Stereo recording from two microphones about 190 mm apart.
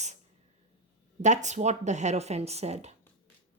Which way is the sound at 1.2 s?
40° right (ahead or behind).